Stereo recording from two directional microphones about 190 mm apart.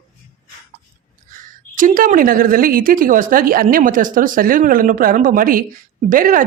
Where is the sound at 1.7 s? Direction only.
45° right (ahead or behind).